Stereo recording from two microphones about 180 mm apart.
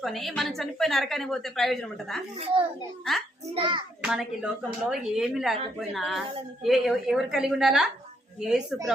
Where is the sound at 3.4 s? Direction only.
30° right (ahead or behind).